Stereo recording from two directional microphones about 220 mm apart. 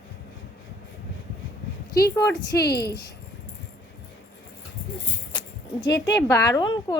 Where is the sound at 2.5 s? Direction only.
45° left (ahead or behind).